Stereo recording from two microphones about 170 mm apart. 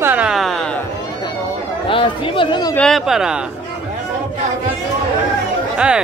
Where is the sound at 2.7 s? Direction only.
5° left (ahead or behind).